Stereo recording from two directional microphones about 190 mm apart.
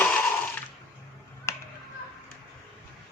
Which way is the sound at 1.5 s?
15° left (ahead or behind).